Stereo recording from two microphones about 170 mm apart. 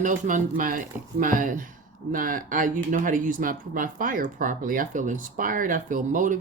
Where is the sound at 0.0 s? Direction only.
50° right (ahead or behind).